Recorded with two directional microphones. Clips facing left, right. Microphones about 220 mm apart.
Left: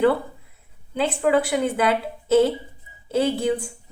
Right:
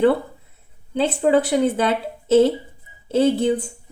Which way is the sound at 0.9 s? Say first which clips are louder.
Right 3 dB; 30° right (ahead or behind).